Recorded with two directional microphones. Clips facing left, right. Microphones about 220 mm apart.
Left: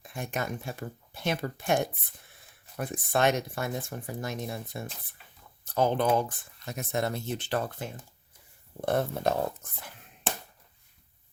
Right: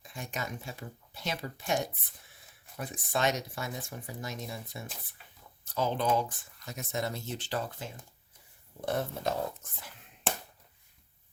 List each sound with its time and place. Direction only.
0.0 s speech: 55° left (ahead or behind)